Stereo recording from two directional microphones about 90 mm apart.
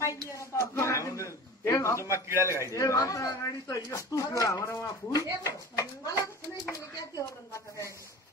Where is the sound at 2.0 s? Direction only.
30° right (ahead or behind).